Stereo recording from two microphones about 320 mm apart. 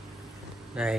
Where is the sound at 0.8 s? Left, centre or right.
Centre.